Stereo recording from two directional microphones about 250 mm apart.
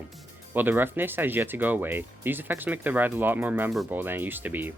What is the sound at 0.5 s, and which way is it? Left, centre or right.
Speech, centre.